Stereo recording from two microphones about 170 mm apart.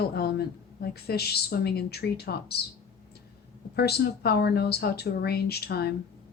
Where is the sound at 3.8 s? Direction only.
70° left (ahead or behind).